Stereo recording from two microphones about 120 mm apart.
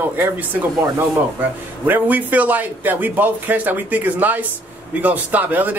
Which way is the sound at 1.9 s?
15° right (ahead or behind).